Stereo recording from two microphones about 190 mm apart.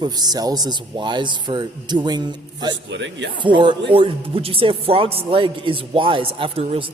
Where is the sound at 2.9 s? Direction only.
70° right (ahead or behind).